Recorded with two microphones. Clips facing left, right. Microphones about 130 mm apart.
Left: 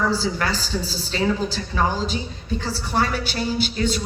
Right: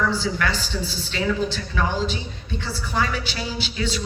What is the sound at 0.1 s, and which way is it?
A woman's voice, 35° left (ahead or behind).